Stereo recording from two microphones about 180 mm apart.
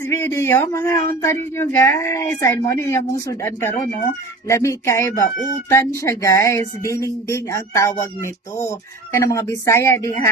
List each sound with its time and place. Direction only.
0.0 s speech: 15° left (ahead or behind)